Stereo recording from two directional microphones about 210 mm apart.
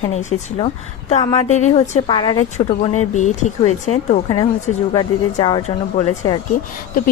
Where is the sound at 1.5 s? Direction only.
35° left (ahead or behind).